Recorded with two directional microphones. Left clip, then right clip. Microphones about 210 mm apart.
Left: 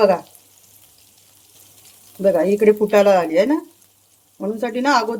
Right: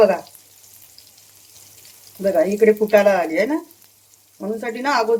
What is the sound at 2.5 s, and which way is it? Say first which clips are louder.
Speech: even; 40° left (ahead or behind).